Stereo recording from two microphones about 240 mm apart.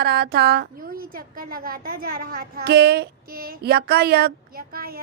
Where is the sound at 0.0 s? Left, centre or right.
Right.